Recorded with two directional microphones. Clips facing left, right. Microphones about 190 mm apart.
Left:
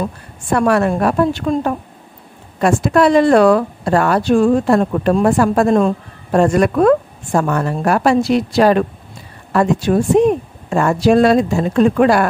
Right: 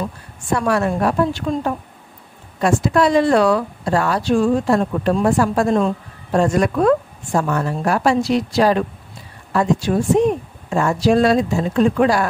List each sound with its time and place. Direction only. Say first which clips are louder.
0.5 s a woman's voice: left 4 dB; 60° left (ahead or behind)